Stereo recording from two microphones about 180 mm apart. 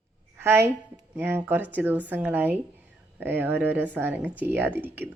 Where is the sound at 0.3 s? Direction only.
10° right (ahead or behind).